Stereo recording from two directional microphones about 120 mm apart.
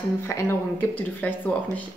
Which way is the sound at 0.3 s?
20° left (ahead or behind).